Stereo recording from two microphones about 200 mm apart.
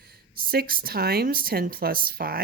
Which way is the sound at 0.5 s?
50° right (ahead or behind).